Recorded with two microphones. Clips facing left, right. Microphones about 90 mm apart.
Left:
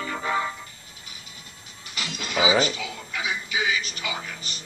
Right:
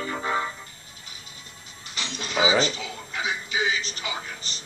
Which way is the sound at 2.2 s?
35° right (ahead or behind).